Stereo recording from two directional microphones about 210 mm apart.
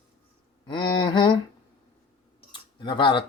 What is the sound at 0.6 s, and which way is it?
Speech, 20° left (ahead or behind).